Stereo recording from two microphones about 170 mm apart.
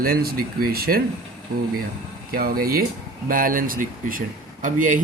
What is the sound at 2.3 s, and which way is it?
Speech, 60° right (ahead or behind).